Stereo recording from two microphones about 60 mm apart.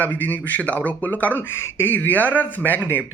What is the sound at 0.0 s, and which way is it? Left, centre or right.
Speech, left.